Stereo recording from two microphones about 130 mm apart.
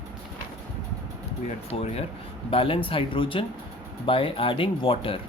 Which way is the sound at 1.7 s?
50° left (ahead or behind).